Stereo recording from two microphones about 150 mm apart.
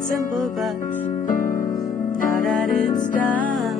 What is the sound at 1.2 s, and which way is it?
Music, 70° left (ahead or behind).